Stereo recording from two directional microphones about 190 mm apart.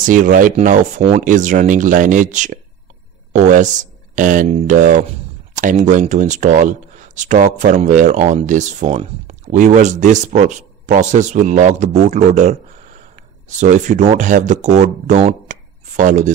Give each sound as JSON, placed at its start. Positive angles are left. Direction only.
{"t": 0.0, "sound": "speech", "side_deg": -45}